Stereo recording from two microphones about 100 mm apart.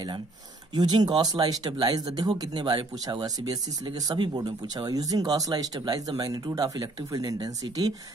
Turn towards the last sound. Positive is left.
turn(degrees=-40)  # may be behind; listen again after turning